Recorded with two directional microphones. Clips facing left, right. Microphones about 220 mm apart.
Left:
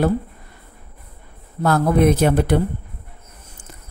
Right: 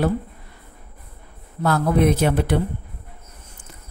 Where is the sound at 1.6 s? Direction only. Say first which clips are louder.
Left 2 dB; 45° left (ahead or behind).